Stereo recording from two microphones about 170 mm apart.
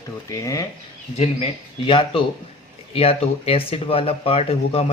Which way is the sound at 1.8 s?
30° left (ahead or behind).